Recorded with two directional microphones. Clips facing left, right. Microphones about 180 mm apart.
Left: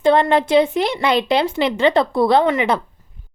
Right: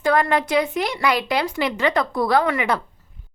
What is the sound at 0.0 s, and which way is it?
A woman's voice, 25° left (ahead or behind).